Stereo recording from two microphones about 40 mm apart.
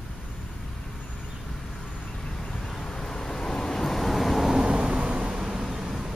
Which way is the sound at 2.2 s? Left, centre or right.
Centre.